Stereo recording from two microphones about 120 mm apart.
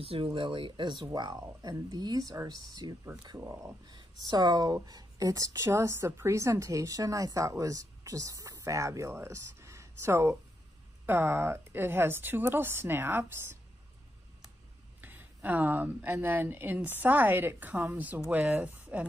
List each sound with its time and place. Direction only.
0.0 s speech: 50° right (ahead or behind); by 13.6 s 20° right (ahead or behind)
15.0 s a woman's voice: 15° right (ahead or behind)